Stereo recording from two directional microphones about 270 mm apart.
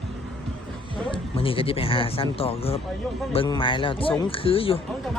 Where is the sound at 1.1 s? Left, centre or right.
Centre.